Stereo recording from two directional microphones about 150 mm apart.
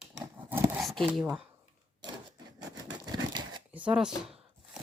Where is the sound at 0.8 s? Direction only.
Centre (ahead or behind).